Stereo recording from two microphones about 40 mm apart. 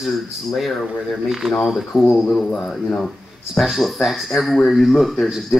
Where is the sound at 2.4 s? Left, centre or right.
Centre.